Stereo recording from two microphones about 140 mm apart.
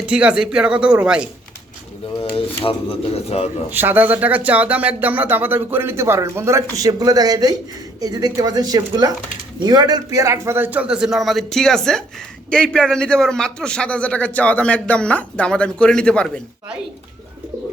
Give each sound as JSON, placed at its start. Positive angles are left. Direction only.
{"t": 0.0, "sound": "speech", "side_deg": -5}
{"t": 2.3, "sound": "speech", "side_deg": 40}
{"t": 3.7, "sound": "a man's voice", "side_deg": -15}